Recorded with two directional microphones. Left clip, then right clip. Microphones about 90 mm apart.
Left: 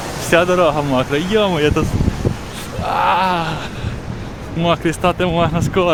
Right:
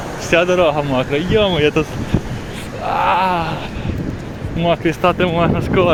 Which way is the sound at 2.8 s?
45° left (ahead or behind).